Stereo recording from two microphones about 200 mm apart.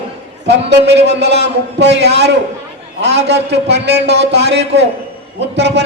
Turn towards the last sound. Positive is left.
turn(degrees=-60)  # may be behind; listen again after turning